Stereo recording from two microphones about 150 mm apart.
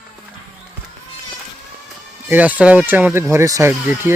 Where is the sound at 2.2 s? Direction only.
10° right (ahead or behind).